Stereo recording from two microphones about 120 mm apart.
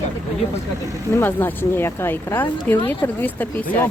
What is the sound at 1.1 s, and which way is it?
Speech, 15° left (ahead or behind).